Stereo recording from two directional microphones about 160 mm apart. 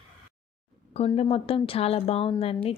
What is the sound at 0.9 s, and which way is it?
Speech, 40° left (ahead or behind).